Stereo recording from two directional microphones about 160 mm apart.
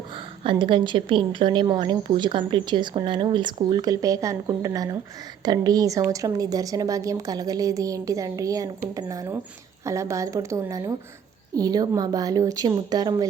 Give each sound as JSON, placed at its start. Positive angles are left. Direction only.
{"t": 0.5, "sound": "a woman's voice", "side_deg": -30}